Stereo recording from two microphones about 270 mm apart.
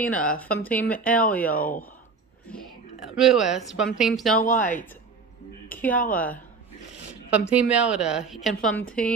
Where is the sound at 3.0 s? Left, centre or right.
Centre.